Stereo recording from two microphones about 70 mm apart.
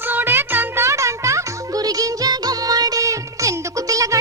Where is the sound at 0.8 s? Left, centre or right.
Right.